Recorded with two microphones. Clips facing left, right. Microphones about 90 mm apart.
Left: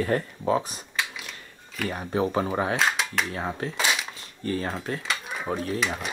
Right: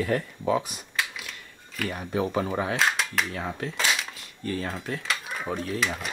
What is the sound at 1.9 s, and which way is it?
Speech, 30° left (ahead or behind).